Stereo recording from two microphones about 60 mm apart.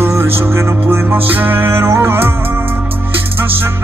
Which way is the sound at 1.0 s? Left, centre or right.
Right.